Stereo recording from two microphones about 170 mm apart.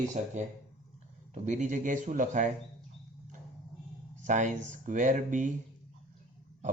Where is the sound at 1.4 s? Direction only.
45° right (ahead or behind).